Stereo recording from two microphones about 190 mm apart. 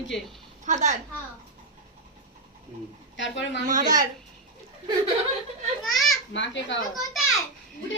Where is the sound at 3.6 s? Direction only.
45° right (ahead or behind).